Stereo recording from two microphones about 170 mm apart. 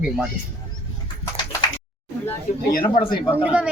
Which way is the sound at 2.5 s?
50° left (ahead or behind).